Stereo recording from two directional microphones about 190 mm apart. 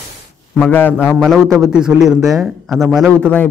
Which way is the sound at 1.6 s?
5° right (ahead or behind).